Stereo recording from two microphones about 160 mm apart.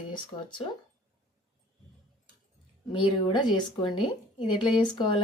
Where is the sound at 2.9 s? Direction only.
30° left (ahead or behind).